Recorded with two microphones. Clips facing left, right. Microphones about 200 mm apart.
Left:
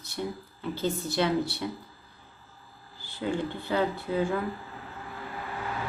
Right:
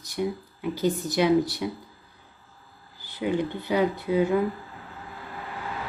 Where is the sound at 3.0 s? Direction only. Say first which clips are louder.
Right 4 dB; 15° right (ahead or behind).